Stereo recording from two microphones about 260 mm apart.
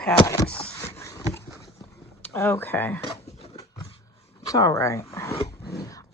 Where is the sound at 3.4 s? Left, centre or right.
Left.